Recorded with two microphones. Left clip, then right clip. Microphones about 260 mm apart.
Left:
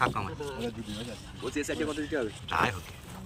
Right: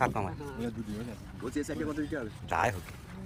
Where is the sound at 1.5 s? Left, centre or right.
Right.